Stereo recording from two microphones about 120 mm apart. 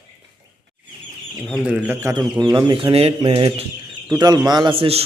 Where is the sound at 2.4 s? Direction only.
35° right (ahead or behind); by 4.0 s 50° right (ahead or behind).